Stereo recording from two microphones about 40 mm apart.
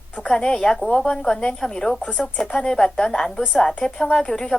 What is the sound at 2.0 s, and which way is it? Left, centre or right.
A woman's voice, left.